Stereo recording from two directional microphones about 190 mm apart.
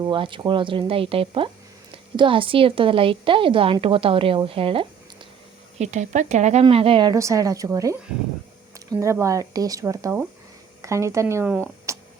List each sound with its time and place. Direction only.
0.0 s a woman's voice: 25° right (ahead or behind)
5.8 s a woman's voice: 40° right (ahead or behind); by 11.9 s 10° right (ahead or behind)